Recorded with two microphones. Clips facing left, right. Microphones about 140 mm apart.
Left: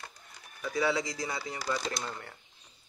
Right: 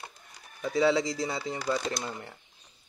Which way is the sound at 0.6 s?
25° right (ahead or behind).